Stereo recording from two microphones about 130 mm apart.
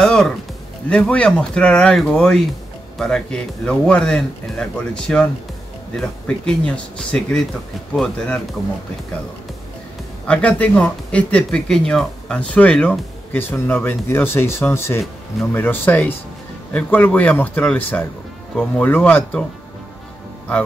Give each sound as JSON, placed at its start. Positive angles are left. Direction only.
{"t": 0.0, "sound": "music", "side_deg": 5}
{"t": 0.8, "sound": "speech", "side_deg": 10}
{"t": 10.2, "sound": "speech", "side_deg": 10}